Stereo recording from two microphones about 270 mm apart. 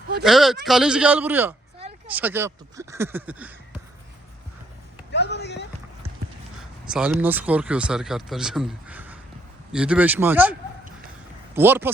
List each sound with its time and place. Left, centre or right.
0.2 s speech: centre
5.1 s a sound: left
6.6 s speech: centre
11.5 s speech: centre